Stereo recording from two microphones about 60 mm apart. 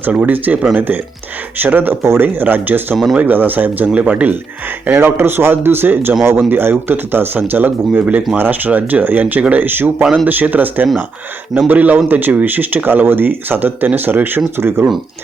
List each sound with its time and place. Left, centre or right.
0.1 s speech: right
4.9 s speech: right